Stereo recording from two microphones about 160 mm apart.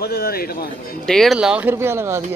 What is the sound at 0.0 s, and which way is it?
Speech, 75° left (ahead or behind).